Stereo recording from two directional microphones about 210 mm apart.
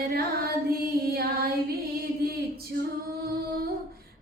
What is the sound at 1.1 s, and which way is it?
Female singing, 45° right (ahead or behind).